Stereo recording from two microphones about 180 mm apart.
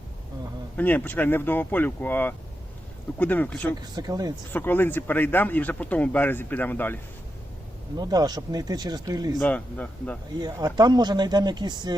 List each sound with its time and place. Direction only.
0.8 s speech: 10° left (ahead or behind)
3.8 s speech: 20° right (ahead or behind)
4.5 s speech: 10° left (ahead or behind)
7.9 s speech: 20° right (ahead or behind)
9.4 s speech: 5° left (ahead or behind)
10.4 s speech: 20° right (ahead or behind)